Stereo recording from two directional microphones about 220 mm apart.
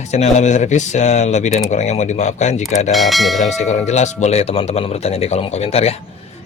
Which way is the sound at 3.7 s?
30° left (ahead or behind).